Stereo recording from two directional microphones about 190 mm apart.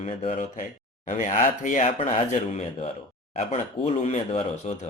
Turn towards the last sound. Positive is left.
turn(degrees=35)  # may be behind; listen again after turning